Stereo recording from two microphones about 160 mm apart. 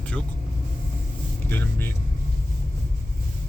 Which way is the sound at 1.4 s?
10° left (ahead or behind).